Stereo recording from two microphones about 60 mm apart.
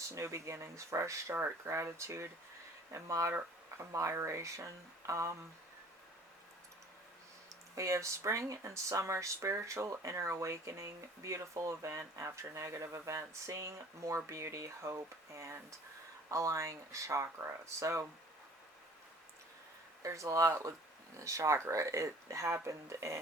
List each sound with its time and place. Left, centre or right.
0.1 s speech: right
4.1 s speech: right
7.8 s speech: right
20.0 s speech: right